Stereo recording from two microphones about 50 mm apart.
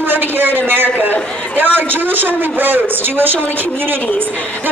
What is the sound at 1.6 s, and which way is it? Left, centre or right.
A man's voice, right.